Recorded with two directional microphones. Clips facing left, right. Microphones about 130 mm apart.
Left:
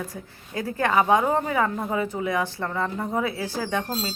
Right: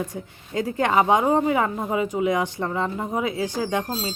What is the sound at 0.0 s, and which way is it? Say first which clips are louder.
A woman's voice: right 4 dB; 20° right (ahead or behind).